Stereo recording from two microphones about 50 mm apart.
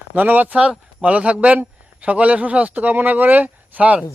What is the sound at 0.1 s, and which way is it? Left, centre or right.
A man's voice, right.